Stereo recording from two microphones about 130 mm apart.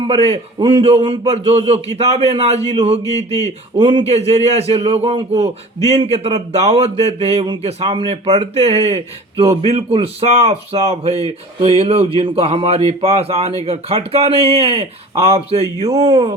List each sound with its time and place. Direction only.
0.3 s a man's voice: 40° right (ahead or behind)
3.0 s speech: 25° left (ahead or behind)
3.8 s speech: 40° right (ahead or behind)
4.1 s a man's voice: 55° right (ahead or behind)
7.9 s speech: 40° right (ahead or behind)
8.1 s a man's voice: 55° right (ahead or behind)